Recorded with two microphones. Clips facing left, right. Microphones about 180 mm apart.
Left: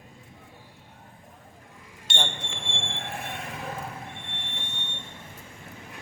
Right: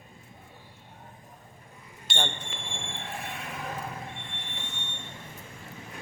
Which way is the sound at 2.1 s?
Centre (ahead or behind).